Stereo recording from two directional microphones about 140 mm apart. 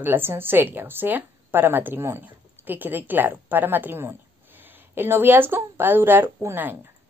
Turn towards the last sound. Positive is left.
turn(degrees=-15)  # may be behind; listen again after turning